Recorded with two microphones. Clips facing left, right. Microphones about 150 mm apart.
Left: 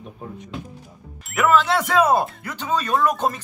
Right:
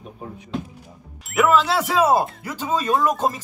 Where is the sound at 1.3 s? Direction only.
Centre (ahead or behind).